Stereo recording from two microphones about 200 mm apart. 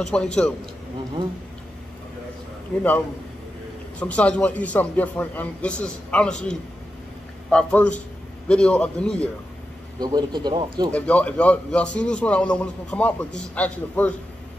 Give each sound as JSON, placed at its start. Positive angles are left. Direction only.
{"t": 0.0, "sound": "a man's voice", "side_deg": 5}
{"t": 4.0, "sound": "a man's voice", "side_deg": 5}
{"t": 7.5, "sound": "a man's voice", "side_deg": 5}
{"t": 9.9, "sound": "speech", "side_deg": -20}
{"t": 10.9, "sound": "a man's voice", "side_deg": 5}